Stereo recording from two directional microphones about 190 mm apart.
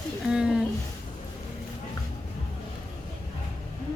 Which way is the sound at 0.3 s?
5° right (ahead or behind).